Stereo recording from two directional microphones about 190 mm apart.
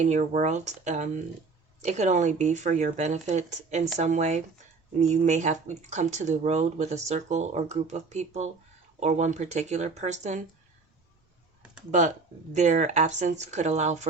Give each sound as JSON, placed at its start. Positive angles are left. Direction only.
{"t": 0.0, "sound": "speech", "side_deg": -40}
{"t": 11.9, "sound": "speech", "side_deg": -40}